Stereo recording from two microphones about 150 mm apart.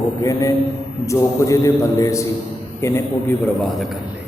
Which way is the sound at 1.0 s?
20° left (ahead or behind).